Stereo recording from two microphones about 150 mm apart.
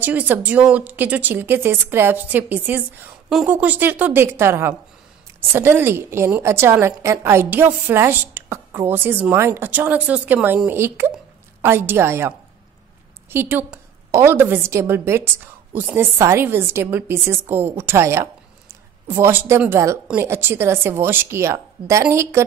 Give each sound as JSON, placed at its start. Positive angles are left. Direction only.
{"t": 0.0, "sound": "a woman's voice", "side_deg": -10}